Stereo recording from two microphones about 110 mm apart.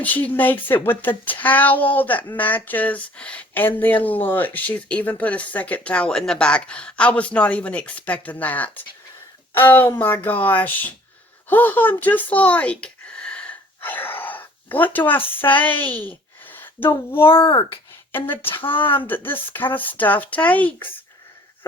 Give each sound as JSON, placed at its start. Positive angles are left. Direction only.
{"t": 0.0, "sound": "speech", "side_deg": 15}
{"t": 11.4, "sound": "a sound", "side_deg": 15}
{"t": 14.9, "sound": "speech", "side_deg": 15}
{"t": 17.2, "sound": "a child's voice", "side_deg": 50}
{"t": 19.0, "sound": "speech", "side_deg": 20}